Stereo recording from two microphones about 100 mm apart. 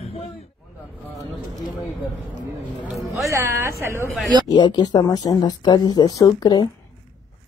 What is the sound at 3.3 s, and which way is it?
Music, 25° right (ahead or behind).